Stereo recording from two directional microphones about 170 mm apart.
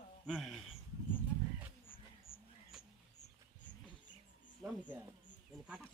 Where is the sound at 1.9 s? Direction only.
55° left (ahead or behind).